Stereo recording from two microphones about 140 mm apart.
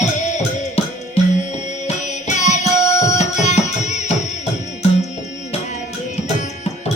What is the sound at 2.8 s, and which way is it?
Music, 20° left (ahead or behind).